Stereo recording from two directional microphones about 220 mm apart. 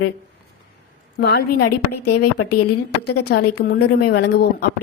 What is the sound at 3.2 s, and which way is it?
Speech, 45° left (ahead or behind).